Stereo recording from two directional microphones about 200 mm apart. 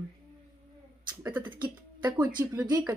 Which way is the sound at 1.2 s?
20° right (ahead or behind).